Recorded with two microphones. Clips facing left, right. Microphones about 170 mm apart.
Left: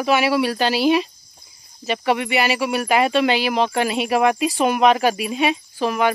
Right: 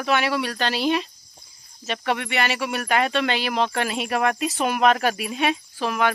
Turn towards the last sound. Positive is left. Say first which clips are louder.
# left 3 dB
turn(degrees=0)  # may be behind; listen again after turning